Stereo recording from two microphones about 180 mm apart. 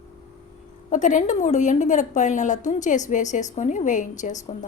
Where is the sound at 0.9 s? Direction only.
45° left (ahead or behind).